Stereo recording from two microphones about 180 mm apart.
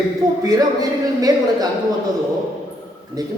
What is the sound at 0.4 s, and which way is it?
Speech, 20° right (ahead or behind).